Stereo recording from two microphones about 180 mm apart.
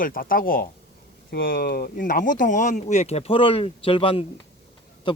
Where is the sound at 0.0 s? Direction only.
50° left (ahead or behind).